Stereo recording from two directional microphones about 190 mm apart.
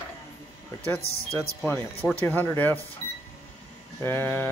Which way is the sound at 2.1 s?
10° left (ahead or behind).